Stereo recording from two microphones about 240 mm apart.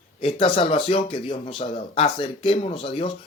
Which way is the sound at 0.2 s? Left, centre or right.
Left.